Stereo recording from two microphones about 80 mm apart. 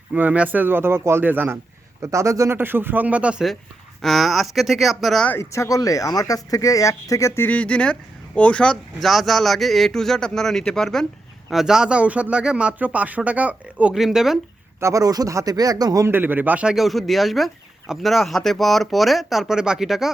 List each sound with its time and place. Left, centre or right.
0.1 s a man's voice: centre
2.0 s speech: right
2.6 s a man's voice: right
4.0 s speech: centre
5.4 s speech: left
7.4 s speech: centre
9.0 s speech: centre
11.5 s speech: centre
13.9 s speech: centre
14.8 s speech: right
16.0 s a man's voice: right
16.6 s speech: centre